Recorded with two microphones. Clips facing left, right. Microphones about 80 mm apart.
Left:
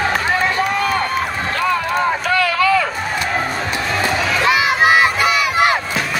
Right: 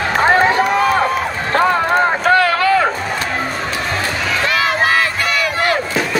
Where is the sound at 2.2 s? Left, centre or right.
Right.